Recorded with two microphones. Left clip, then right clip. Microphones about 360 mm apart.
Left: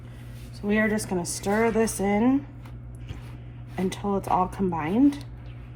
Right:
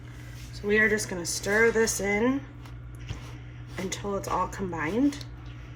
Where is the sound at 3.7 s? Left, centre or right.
Left.